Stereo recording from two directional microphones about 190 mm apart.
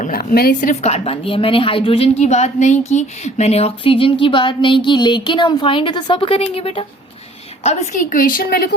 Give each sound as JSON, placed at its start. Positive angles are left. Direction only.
{"t": 0.0, "sound": "a woman's voice", "side_deg": 45}